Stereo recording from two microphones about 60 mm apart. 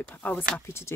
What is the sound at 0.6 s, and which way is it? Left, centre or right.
Speech, left.